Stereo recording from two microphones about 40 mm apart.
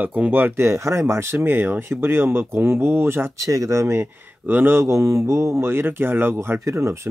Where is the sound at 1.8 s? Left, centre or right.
Right.